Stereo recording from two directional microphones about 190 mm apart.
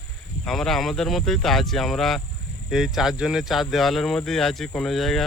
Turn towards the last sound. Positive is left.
turn(degrees=0)  # may be behind; listen again after turning